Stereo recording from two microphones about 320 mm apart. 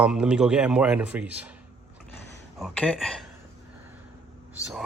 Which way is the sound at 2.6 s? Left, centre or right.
Centre.